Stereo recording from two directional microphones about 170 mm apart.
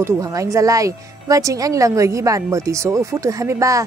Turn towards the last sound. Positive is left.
turn(degrees=-20)  # may be behind; listen again after turning